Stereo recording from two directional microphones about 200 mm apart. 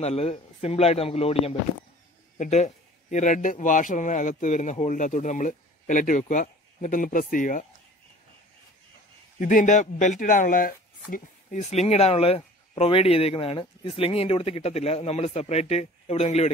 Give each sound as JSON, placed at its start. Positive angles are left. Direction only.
{"t": 0.0, "sound": "speech", "side_deg": 30}
{"t": 9.4, "sound": "speech", "side_deg": 40}